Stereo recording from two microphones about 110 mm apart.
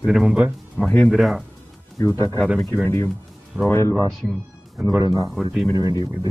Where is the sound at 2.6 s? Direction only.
20° left (ahead or behind).